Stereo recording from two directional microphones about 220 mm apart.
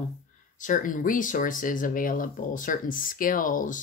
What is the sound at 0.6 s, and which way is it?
Speech, 35° left (ahead or behind).